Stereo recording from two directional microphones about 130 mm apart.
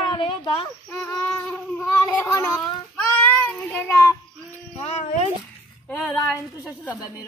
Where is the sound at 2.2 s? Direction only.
25° left (ahead or behind).